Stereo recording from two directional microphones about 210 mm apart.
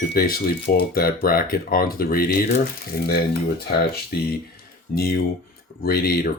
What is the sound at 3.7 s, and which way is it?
Speech, 50° left (ahead or behind).